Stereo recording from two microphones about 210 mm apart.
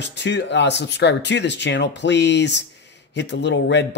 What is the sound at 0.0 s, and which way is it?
Speech, 55° left (ahead or behind).